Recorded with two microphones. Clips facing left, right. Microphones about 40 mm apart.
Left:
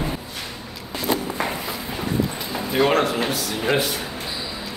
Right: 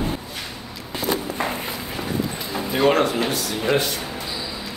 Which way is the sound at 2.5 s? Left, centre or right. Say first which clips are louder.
Right 1 dB; centre.